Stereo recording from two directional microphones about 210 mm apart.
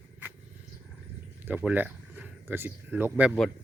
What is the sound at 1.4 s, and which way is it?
Speech, 5° right (ahead or behind).